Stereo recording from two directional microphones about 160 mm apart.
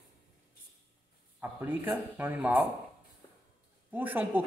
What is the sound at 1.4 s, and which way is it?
Speech, 10° right (ahead or behind).